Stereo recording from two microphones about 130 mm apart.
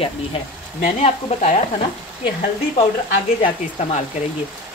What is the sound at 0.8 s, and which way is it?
Speech, 60° left (ahead or behind).